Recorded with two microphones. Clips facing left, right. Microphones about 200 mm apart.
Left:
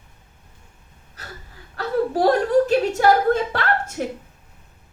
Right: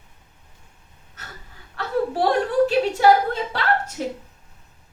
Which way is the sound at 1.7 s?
40° left (ahead or behind).